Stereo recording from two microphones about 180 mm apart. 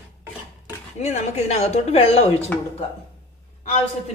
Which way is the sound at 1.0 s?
40° left (ahead or behind).